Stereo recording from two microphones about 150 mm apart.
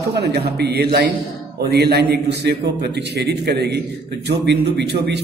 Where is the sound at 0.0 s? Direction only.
90° right.